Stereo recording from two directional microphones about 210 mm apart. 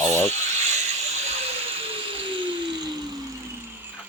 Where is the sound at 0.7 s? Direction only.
30° right (ahead or behind).